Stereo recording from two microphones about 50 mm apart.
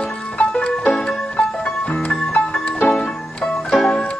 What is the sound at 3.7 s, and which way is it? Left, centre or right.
Music, centre.